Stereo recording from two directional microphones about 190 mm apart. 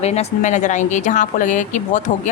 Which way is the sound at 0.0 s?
35° left (ahead or behind).